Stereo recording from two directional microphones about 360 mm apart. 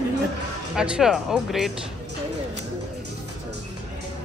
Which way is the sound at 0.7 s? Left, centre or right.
Centre.